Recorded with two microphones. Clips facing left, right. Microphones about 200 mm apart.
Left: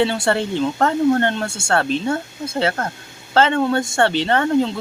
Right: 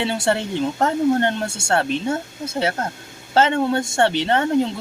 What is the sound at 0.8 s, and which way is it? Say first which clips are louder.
Speech: left 1 dB; 15° right (ahead or behind).